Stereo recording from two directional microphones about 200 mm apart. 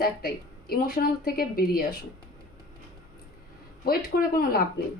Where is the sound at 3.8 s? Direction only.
50° left (ahead or behind).